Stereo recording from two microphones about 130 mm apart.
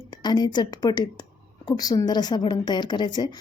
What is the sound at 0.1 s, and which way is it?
A woman's voice, 35° left (ahead or behind).